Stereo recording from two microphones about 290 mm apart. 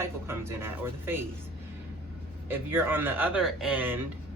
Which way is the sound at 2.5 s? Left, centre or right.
Centre.